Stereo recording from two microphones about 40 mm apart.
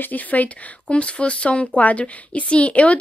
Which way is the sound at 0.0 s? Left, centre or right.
Left.